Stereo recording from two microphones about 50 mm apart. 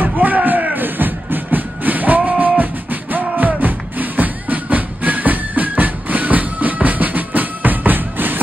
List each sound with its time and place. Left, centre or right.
0.0 s music: right